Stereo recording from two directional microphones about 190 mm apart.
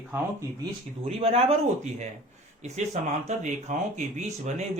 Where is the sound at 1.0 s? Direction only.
35° right (ahead or behind).